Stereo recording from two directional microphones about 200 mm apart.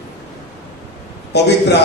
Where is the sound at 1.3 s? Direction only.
55° left (ahead or behind).